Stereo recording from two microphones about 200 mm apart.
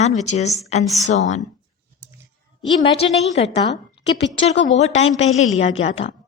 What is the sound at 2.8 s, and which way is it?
Speech, 30° left (ahead or behind).